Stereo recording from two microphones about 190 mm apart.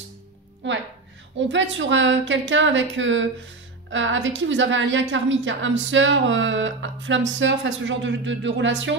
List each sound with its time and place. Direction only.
0.6 s a woman's voice: 70° right (ahead or behind)